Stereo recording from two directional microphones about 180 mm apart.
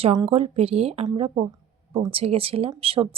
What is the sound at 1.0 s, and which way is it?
Speech, 30° right (ahead or behind).